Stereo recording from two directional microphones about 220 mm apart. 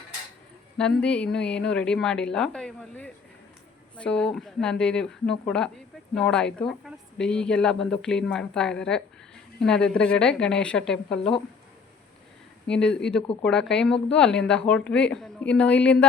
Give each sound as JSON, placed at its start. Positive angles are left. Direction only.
{"t": 0.8, "sound": "a woman's voice", "side_deg": 5}
{"t": 12.6, "sound": "a woman's voice", "side_deg": 5}